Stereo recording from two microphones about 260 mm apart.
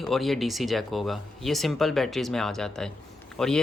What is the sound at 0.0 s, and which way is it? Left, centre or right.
Speech, centre.